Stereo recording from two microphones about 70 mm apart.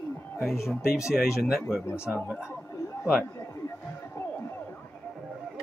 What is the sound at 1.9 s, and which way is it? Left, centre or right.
Speech, left.